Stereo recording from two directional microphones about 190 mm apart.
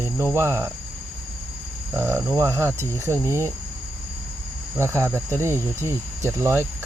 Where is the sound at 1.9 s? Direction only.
10° right (ahead or behind).